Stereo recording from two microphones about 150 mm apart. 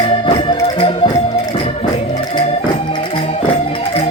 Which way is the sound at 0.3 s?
35° left (ahead or behind).